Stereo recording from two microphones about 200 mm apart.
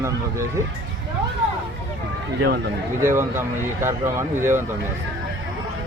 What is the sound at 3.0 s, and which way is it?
Speech, 15° right (ahead or behind).